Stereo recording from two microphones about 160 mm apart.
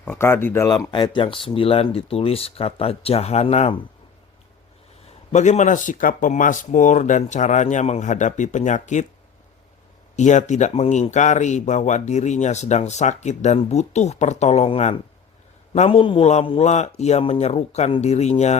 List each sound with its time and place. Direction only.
0.0 s speech: 10° left (ahead or behind)
0.7 s speech: 30° left (ahead or behind)
5.3 s speech: 45° left (ahead or behind)
10.2 s speech: 50° left (ahead or behind)